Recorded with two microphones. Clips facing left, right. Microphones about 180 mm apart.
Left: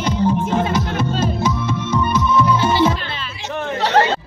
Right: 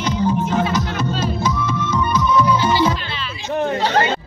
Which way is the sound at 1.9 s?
25° left (ahead or behind).